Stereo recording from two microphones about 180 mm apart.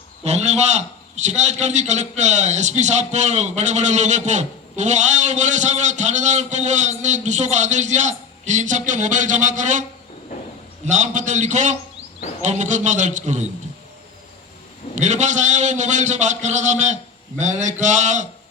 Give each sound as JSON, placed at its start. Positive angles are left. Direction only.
{"t": 0.3, "sound": "a man's voice", "side_deg": -40}
{"t": 10.8, "sound": "a man's voice", "side_deg": -45}
{"t": 14.9, "sound": "a man's voice", "side_deg": -40}